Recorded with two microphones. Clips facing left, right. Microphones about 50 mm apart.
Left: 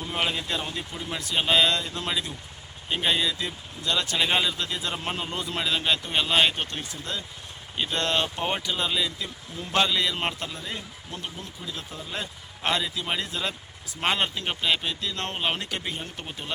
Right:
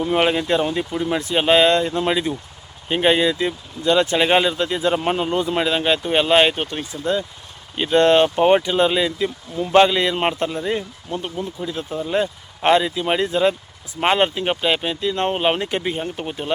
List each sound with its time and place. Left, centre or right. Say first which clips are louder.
0.0 s speech: right 10 dB; right